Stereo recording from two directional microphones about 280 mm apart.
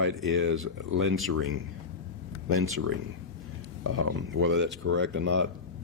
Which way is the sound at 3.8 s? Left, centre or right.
Right.